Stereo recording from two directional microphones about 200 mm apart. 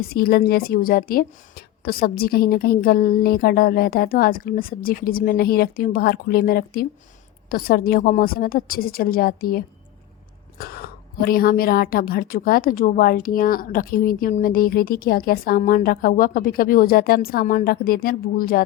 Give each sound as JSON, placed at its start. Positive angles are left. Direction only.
{"t": 0.0, "sound": "a woman's voice", "side_deg": 50}